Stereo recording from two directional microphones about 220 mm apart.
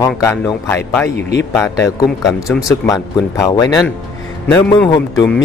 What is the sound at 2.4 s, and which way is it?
Speech, centre (ahead or behind).